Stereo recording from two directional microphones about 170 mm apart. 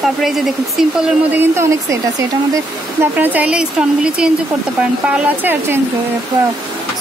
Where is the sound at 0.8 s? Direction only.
5° right (ahead or behind).